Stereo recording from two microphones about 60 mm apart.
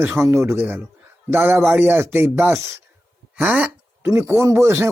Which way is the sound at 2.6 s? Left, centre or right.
Right.